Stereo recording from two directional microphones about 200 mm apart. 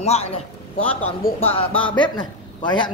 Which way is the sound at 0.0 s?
30° left (ahead or behind).